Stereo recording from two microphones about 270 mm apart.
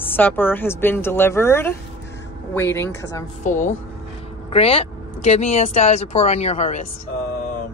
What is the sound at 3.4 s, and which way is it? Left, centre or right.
Speech, left.